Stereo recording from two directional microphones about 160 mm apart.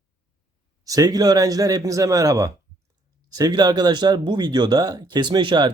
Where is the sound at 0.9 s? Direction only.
25° right (ahead or behind).